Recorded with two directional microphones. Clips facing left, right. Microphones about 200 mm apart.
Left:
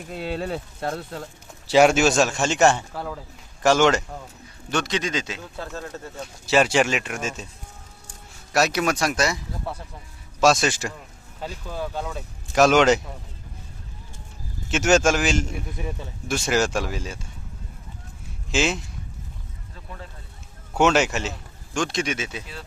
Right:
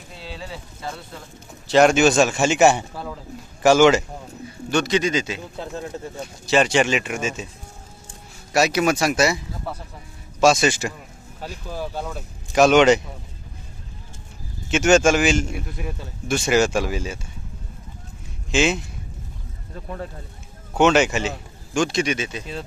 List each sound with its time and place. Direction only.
0.1 s speech: 55° left (ahead or behind)
1.7 s a man's voice: 5° left (ahead or behind)
5.5 s speech: 15° right (ahead or behind)
6.4 s a man's voice: 5° left (ahead or behind)
8.5 s a man's voice: centre (ahead or behind)
14.7 s a man's voice: centre (ahead or behind)
18.5 s a man's voice: centre (ahead or behind)
20.7 s a man's voice: centre (ahead or behind)